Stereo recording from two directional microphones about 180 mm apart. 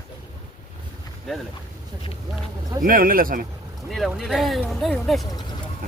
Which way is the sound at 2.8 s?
50° right (ahead or behind).